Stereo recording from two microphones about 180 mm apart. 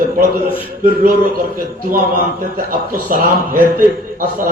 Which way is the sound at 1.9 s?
50° right (ahead or behind).